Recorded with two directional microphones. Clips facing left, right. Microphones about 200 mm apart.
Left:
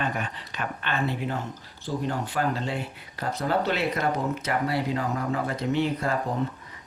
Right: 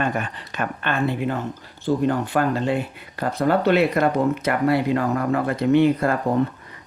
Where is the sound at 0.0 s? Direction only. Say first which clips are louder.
Right 5 dB; 50° right (ahead or behind).